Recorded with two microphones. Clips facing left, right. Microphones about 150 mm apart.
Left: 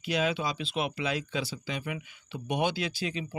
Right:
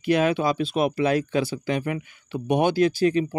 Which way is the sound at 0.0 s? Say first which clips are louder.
Right 8 dB; 55° right (ahead or behind).